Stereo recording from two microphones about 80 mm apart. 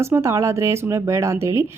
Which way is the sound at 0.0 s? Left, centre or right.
Right.